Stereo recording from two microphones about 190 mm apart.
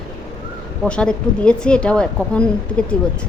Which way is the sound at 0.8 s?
5° left (ahead or behind).